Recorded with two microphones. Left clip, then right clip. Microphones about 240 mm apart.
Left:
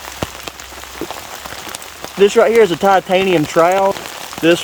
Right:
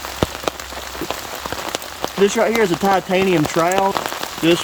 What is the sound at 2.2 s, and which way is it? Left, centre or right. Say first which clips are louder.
Speech: left 6 dB; centre.